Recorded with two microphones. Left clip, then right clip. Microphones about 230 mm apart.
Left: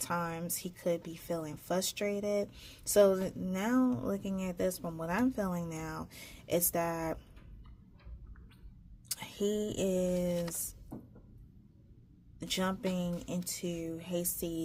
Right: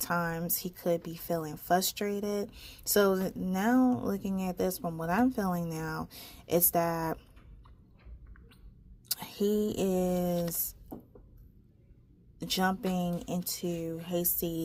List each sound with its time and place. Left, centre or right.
0.0 s speech: right
9.0 s a sound: right
9.6 s speech: right
12.4 s speech: right